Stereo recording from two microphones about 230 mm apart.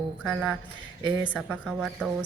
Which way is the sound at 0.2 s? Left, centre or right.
Centre.